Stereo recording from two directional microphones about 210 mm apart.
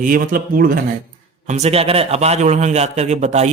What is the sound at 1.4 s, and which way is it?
A man's voice, 30° right (ahead or behind).